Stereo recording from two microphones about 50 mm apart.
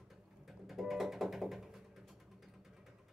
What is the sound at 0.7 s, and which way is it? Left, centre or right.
Music, centre.